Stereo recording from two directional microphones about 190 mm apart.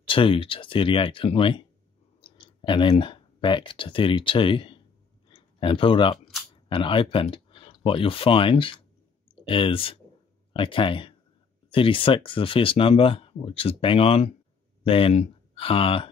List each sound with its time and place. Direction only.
0.0 s speech: 25° left (ahead or behind)
5.3 s a sound: 25° left (ahead or behind)
6.7 s speech: 25° left (ahead or behind)